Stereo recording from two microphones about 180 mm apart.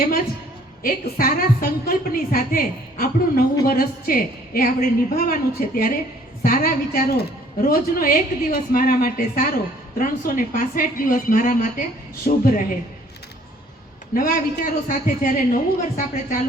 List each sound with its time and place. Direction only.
0.8 s a woman's voice: 55° left (ahead or behind)
14.2 s a woman's voice: 50° left (ahead or behind)